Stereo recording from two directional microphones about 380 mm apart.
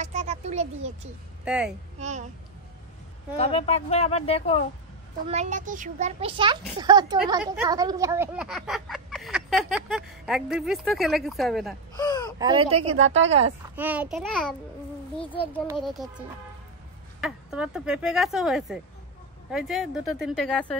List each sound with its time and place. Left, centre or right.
0.0 s a sound: centre
1.4 s speech: centre
2.0 s speech: centre
3.3 s speech: centre
5.3 s a child's voice: centre
12.0 s a sound: centre
12.4 s speech: centre
12.9 s a woman's voice: right
13.7 s a child's voice: centre
15.1 s speech: centre
15.6 s a child's voice: centre